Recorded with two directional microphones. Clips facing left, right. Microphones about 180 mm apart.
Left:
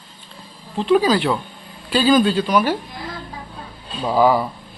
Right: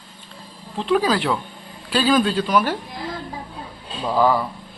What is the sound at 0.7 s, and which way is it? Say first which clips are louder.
Speech: left 3 dB; centre (ahead or behind).